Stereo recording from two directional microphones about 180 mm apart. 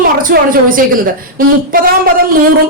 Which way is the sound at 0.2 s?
50° right (ahead or behind).